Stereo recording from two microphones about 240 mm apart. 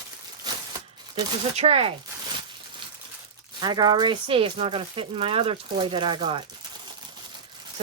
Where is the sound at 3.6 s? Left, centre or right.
Centre.